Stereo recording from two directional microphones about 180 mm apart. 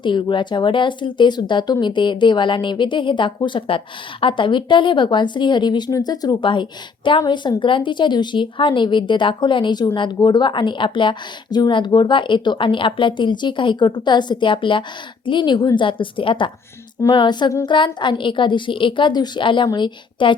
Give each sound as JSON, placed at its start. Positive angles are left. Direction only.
{"t": 0.0, "sound": "speech", "side_deg": 25}